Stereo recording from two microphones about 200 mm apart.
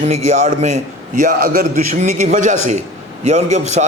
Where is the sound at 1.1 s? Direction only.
45° right (ahead or behind).